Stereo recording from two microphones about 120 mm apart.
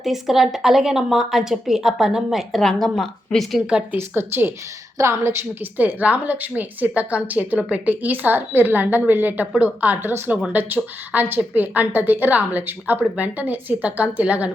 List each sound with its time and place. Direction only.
0.0 s a woman's voice: centre (ahead or behind)
3.9 s a woman's voice: 20° right (ahead or behind)